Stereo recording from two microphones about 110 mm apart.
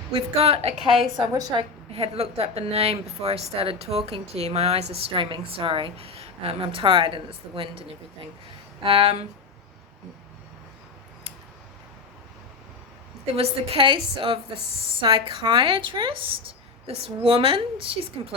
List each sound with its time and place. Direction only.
0.1 s a woman's voice: 65° right (ahead or behind)
0.8 s a woman's voice: centre (ahead or behind)
1.5 s a woman's voice: 60° right (ahead or behind)
13.3 s a woman's voice: 60° right (ahead or behind)